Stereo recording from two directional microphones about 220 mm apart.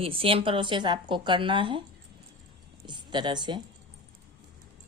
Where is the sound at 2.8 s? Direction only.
20° right (ahead or behind).